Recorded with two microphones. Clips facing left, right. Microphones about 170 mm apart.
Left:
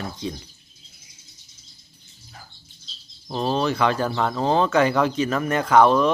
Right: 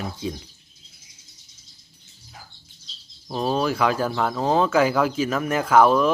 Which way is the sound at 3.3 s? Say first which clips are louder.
Even; 5° right (ahead or behind).